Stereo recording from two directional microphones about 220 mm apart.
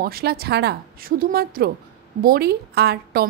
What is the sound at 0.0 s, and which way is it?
Speech, 45° right (ahead or behind).